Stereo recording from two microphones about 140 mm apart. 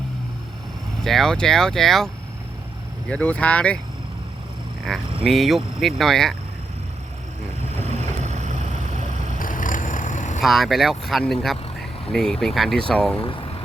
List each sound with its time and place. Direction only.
1.0 s speech: centre (ahead or behind)
3.1 s speech: 10° left (ahead or behind)
4.9 s speech: 5° left (ahead or behind)
7.8 s vehicle: 55° right (ahead or behind)
9.4 s vehicle: 70° left (ahead or behind)
10.4 s speech: centre (ahead or behind)
13.2 s vehicle: 40° left (ahead or behind)